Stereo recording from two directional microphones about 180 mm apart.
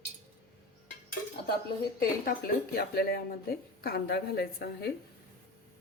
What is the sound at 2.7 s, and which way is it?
A woman's voice, 60° left (ahead or behind).